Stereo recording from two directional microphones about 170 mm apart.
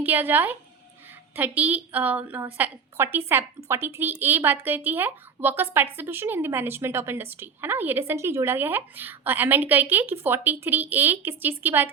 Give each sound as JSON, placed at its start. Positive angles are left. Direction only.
{"t": 0.0, "sound": "a woman's voice", "side_deg": -10}